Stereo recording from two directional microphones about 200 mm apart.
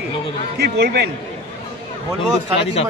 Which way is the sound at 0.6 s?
55° right (ahead or behind).